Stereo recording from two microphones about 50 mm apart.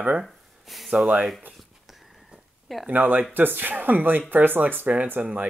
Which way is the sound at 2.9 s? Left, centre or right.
Right.